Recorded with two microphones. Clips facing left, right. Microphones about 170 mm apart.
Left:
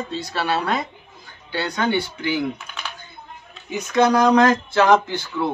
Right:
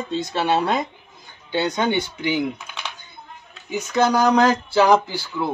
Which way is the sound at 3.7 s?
5° right (ahead or behind).